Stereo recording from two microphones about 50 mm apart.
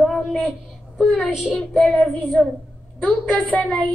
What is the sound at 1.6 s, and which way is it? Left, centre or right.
Child singing, centre.